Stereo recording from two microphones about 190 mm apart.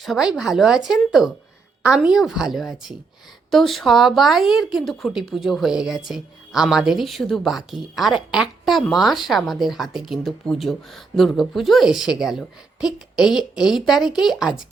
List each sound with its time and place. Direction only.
0.0 s a woman's voice: centre (ahead or behind)